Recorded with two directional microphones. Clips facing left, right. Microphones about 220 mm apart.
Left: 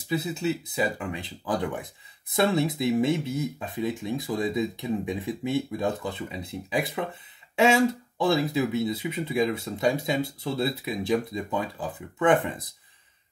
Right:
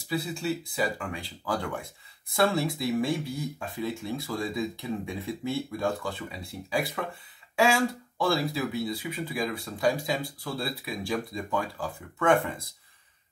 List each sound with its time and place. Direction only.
0.1 s speech: 20° left (ahead or behind)